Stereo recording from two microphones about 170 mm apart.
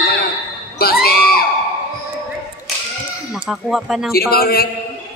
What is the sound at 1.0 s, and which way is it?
Children shouting, 65° left (ahead or behind).